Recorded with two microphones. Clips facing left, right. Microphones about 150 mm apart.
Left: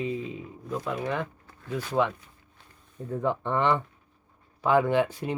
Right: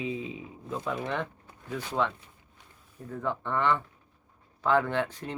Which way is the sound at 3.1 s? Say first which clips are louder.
Left 4 dB; 20° left (ahead or behind).